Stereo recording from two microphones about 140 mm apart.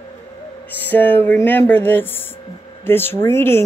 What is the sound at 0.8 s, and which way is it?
Speech, 15° left (ahead or behind).